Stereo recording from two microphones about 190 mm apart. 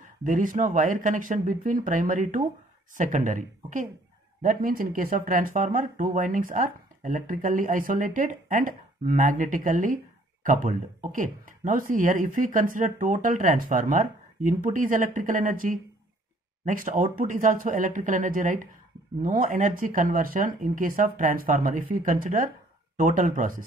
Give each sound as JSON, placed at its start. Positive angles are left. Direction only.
{"t": 0.2, "sound": "speech", "side_deg": -45}